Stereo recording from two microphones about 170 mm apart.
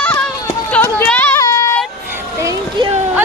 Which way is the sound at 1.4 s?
20° left (ahead or behind).